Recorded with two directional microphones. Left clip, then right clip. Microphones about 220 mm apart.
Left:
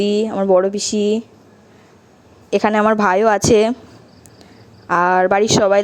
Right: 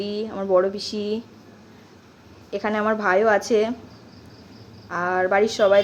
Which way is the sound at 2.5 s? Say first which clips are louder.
Left 8 dB; 35° left (ahead or behind).